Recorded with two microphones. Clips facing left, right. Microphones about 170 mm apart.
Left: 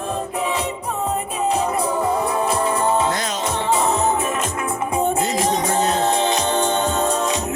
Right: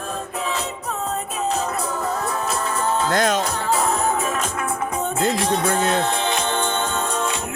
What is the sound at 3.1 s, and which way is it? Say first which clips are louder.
Music: right 5 dB; 50° right (ahead or behind).